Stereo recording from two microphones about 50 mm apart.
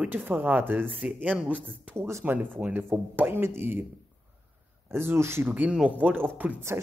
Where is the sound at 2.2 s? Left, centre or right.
Right.